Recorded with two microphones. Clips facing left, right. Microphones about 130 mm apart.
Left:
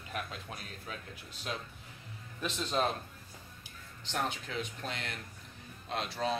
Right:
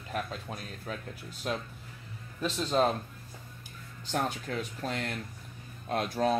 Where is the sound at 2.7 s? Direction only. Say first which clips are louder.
Right 5 dB; 35° right (ahead or behind).